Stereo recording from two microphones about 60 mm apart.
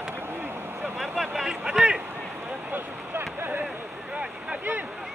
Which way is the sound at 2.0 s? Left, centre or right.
Right.